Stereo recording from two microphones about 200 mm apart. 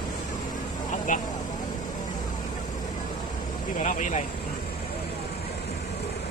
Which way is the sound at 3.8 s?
40° left (ahead or behind).